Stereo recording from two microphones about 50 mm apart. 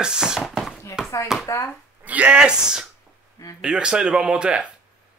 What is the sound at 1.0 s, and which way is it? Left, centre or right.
Chopping, centre.